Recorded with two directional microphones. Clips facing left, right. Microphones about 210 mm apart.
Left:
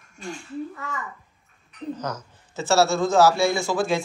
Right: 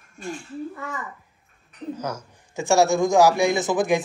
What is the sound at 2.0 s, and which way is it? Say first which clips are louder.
A man's voice: right 1 dB; 10° right (ahead or behind).